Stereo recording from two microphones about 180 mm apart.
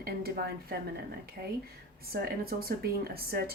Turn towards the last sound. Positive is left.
turn(degrees=-60)  # may be behind; listen again after turning